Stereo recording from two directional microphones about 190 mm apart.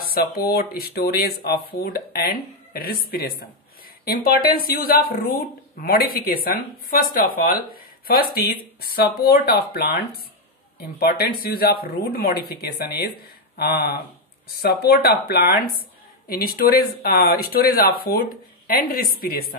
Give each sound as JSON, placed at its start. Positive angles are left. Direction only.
{"t": 0.0, "sound": "a woman's voice", "side_deg": 50}